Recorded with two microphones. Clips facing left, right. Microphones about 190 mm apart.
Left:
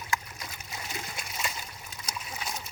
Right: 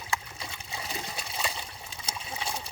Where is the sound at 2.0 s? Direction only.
30° right (ahead or behind).